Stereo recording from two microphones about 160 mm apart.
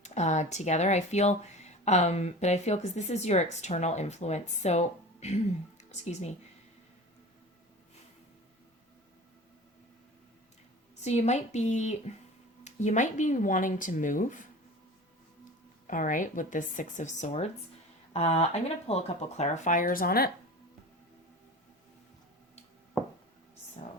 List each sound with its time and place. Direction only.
0.0 s speech: 45° left (ahead or behind)
11.0 s speech: 45° left (ahead or behind)
15.9 s speech: 55° left (ahead or behind)